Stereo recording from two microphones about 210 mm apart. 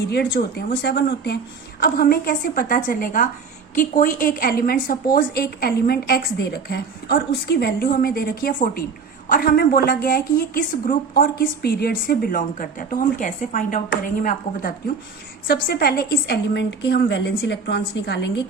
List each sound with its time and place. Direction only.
0.3 s a woman's voice: 50° left (ahead or behind)